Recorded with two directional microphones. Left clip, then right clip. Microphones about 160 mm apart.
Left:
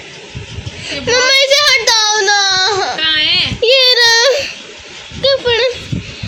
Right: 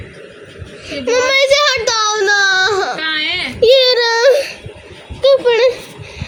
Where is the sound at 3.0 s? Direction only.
30° right (ahead or behind).